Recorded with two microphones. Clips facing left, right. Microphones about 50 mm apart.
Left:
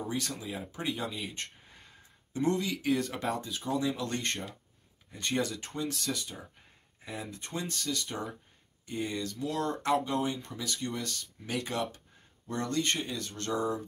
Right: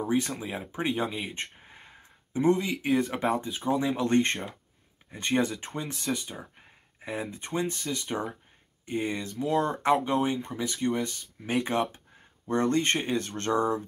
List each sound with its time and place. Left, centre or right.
0.0 s speech: right